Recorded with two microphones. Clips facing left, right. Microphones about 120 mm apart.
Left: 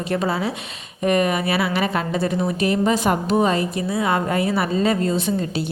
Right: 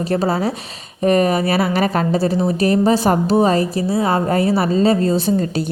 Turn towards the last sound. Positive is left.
turn(degrees=-40)  # may be behind; listen again after turning